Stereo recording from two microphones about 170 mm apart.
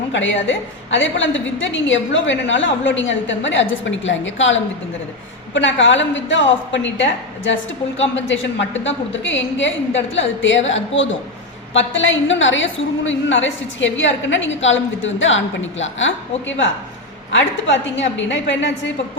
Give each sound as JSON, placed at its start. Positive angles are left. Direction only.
{"t": 0.1, "sound": "a woman's voice", "side_deg": 90}
{"t": 17.3, "sound": "a woman's voice", "side_deg": 90}